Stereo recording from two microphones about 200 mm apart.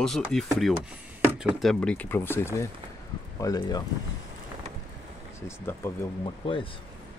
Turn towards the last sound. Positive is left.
turn(degrees=25)  # may be behind; listen again after turning